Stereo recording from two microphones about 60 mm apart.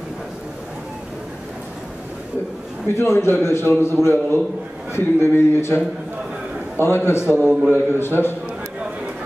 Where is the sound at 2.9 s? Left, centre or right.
Left.